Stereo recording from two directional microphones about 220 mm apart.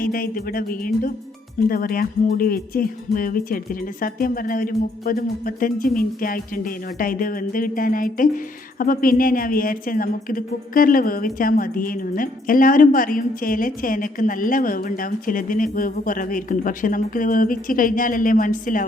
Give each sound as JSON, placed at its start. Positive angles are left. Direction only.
{"t": 0.0, "sound": "speech", "side_deg": 40}